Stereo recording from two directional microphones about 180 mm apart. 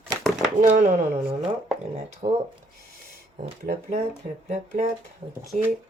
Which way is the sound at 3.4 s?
35° right (ahead or behind).